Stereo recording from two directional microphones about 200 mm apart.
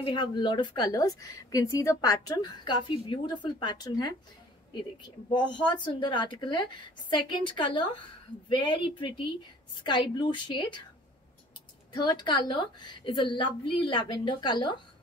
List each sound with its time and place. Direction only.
0.0 s a woman's voice: 25° left (ahead or behind)
11.9 s a woman's voice: 20° left (ahead or behind)